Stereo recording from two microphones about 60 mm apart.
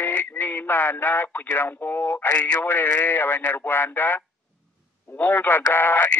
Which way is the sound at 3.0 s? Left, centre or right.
Left.